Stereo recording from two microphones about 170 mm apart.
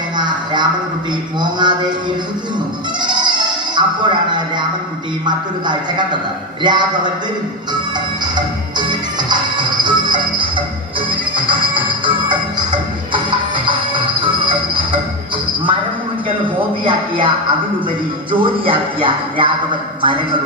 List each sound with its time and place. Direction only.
0.2 s a sound: 25° right (ahead or behind)
1.4 s speech: 25° right (ahead or behind)
3.0 s music: 25° right (ahead or behind)
5.2 s speech: 25° right (ahead or behind)
8.9 s music: 25° right (ahead or behind)
16.8 s speech: 30° right (ahead or behind)